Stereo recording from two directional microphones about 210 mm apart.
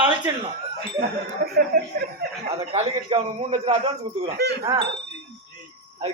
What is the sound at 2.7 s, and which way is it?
A man's voice, 30° right (ahead or behind).